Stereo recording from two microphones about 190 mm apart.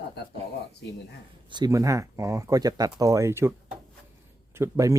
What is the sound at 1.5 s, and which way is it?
Speech, 20° right (ahead or behind).